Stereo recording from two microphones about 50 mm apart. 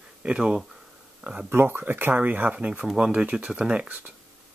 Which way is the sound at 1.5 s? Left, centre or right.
Right.